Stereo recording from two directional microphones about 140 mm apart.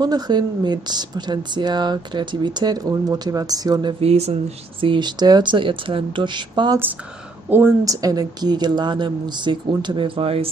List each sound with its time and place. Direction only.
0.0 s speech: 30° right (ahead or behind)
4.0 s a woman's voice: 50° right (ahead or behind); by 6.8 s 30° right (ahead or behind)
7.4 s a woman's voice: 15° right (ahead or behind); by 10.5 s 40° right (ahead or behind)